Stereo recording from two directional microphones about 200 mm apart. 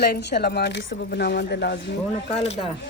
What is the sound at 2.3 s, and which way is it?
Speech, 30° left (ahead or behind).